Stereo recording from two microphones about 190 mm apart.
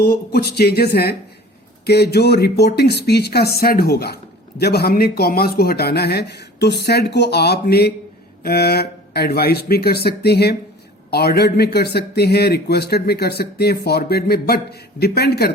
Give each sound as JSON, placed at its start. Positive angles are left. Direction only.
{"t": 0.0, "sound": "speech", "side_deg": 55}